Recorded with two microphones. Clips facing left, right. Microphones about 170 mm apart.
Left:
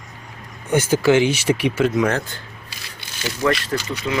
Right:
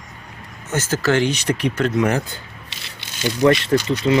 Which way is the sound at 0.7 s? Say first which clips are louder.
Left 4 dB; 10° left (ahead or behind).